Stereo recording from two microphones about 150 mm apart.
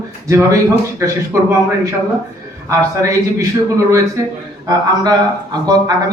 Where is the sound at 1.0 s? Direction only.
20° right (ahead or behind).